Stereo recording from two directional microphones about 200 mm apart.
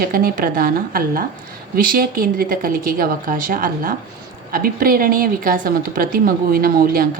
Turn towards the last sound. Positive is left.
turn(degrees=-45)  # may be behind; listen again after turning